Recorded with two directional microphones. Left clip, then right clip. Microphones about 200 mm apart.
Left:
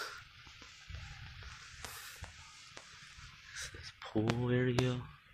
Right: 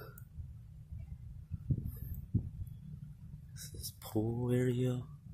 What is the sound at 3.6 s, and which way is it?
Writing, 15° right (ahead or behind).